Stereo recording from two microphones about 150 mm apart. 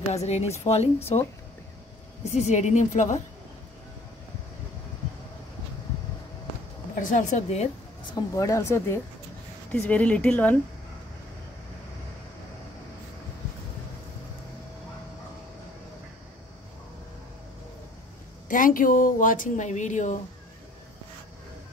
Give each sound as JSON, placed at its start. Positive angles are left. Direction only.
{"t": 0.1, "sound": "speech", "side_deg": 45}
{"t": 2.3, "sound": "speech", "side_deg": 50}
{"t": 7.0, "sound": "speech", "side_deg": 60}
{"t": 8.1, "sound": "a woman's voice", "side_deg": 20}
{"t": 18.5, "sound": "speech", "side_deg": 65}